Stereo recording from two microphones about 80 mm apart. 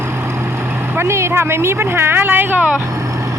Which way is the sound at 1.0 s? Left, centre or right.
Right.